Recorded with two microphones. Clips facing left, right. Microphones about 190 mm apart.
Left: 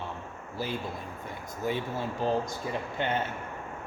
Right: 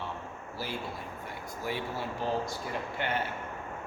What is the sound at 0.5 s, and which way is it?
Speech, 20° left (ahead or behind).